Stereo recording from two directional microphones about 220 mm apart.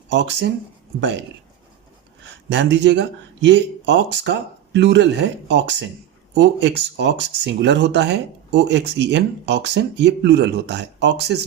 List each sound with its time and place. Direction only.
0.1 s speech: 55° right (ahead or behind)
2.5 s speech: 55° right (ahead or behind)